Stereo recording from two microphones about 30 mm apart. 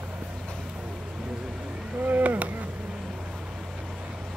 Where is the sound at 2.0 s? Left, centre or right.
Right.